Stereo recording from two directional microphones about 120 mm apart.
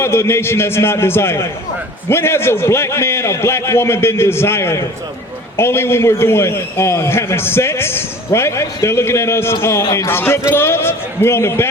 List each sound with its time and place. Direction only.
0.0 s a man's voice: 20° left (ahead or behind)